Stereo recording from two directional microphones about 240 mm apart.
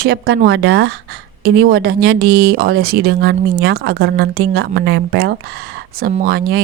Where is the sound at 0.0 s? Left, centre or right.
Right.